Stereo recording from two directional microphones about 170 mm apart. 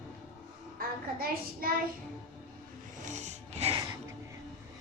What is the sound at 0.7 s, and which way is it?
Speech, 60° right (ahead or behind).